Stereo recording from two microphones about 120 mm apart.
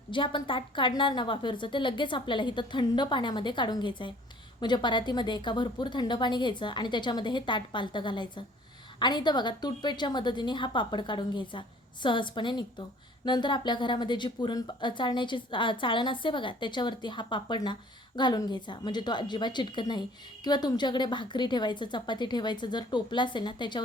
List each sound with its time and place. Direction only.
0.1 s a woman's voice: 45° left (ahead or behind)